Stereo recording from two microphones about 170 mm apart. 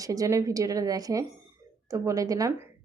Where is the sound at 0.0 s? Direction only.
20° right (ahead or behind).